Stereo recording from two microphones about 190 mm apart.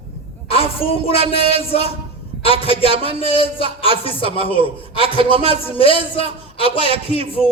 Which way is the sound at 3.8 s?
30° left (ahead or behind).